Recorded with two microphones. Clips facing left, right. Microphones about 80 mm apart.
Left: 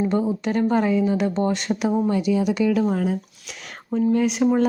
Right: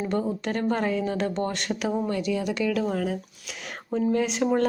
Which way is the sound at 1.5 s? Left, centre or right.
Centre.